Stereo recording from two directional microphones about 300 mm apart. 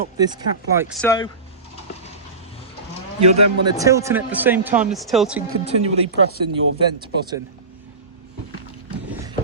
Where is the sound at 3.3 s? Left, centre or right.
Right.